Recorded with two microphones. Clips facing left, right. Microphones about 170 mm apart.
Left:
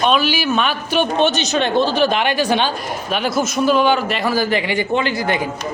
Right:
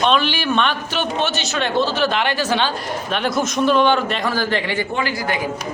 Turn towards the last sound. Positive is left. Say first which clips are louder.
# left 4 dB
turn(degrees=25)  # may be behind; listen again after turning